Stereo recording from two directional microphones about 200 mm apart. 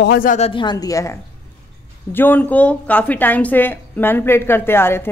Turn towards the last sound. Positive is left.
turn(degrees=10)  # may be behind; listen again after turning